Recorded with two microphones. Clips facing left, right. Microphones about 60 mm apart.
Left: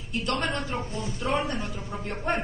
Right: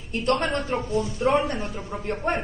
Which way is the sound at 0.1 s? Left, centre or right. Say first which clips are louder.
Right 5 dB; right.